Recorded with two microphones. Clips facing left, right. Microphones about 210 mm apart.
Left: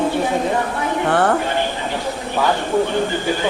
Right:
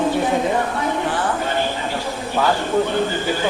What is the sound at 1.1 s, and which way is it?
Speech, 65° left (ahead or behind).